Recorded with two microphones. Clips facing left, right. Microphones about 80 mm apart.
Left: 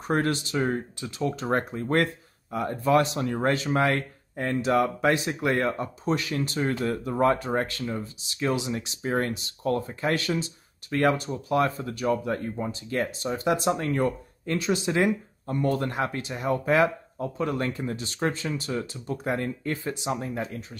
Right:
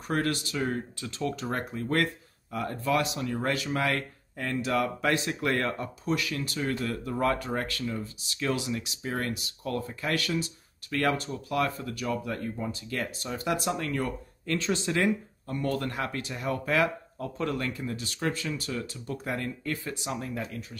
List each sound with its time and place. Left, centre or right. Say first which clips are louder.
0.1 s speech: left 4 dB; left
8.7 s speech: left 5 dB; left